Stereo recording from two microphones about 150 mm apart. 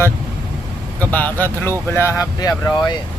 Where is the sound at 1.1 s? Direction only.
10° left (ahead or behind).